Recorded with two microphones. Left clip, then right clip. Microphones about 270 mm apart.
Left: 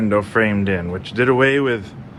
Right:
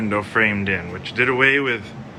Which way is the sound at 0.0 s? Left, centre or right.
Centre.